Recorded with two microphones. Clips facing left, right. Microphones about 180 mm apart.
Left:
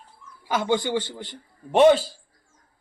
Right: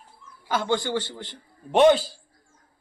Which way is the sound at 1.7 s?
5° left (ahead or behind).